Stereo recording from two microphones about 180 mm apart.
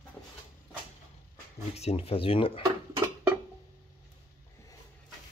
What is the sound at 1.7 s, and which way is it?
Speech, 35° left (ahead or behind).